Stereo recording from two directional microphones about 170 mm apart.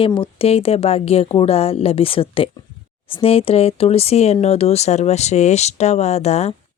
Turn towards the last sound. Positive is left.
turn(degrees=40)  # may be behind; listen again after turning